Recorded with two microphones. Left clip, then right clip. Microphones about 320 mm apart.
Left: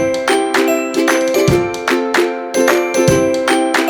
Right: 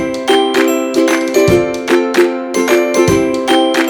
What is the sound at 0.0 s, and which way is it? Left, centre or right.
Music, centre.